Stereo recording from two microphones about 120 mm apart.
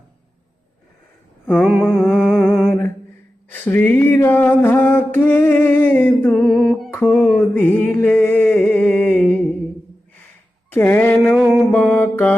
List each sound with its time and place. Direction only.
1.5 s mantra: centre (ahead or behind)
2.6 s a sound: 20° left (ahead or behind)
6.3 s a sound: centre (ahead or behind)
7.0 s mantra: centre (ahead or behind)
7.5 s music: 10° left (ahead or behind)
10.7 s speech: 15° left (ahead or behind)
11.5 s music: centre (ahead or behind)
11.8 s music: 15° left (ahead or behind)